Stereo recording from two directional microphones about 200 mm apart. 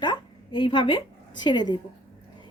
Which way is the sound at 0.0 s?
25° left (ahead or behind).